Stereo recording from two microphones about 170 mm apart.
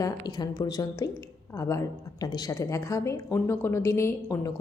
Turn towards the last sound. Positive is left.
turn(degrees=15)  # may be behind; listen again after turning